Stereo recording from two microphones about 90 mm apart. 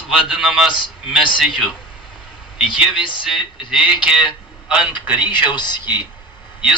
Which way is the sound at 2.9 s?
70° left (ahead or behind).